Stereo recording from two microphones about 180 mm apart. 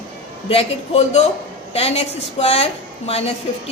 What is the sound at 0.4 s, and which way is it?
A woman's voice, 35° left (ahead or behind).